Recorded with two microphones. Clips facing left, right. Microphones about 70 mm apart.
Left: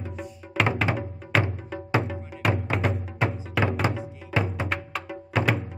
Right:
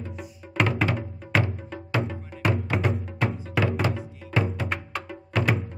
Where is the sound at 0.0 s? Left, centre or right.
Centre.